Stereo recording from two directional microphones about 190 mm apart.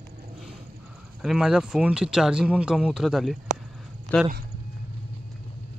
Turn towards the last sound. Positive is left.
turn(degrees=10)  # may be behind; listen again after turning